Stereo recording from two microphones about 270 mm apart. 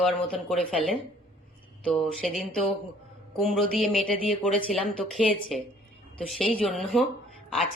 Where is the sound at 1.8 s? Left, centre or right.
Centre.